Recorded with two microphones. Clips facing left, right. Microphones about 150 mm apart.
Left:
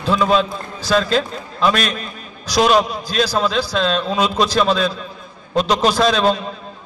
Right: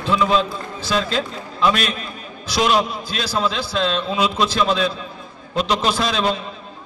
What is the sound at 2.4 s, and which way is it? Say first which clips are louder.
A man's voice: left 4 dB; 40° left (ahead or behind).